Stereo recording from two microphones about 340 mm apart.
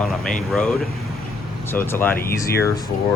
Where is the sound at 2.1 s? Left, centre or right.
Left.